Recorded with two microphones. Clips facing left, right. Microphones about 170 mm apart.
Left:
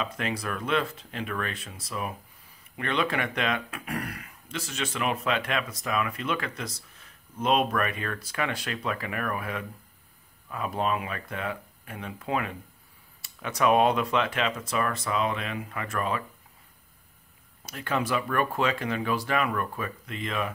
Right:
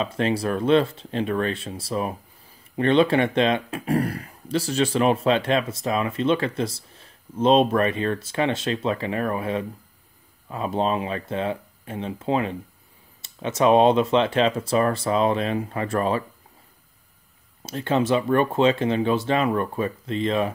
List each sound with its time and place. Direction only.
0.0 s speech: 30° right (ahead or behind)
17.6 s speech: 25° right (ahead or behind)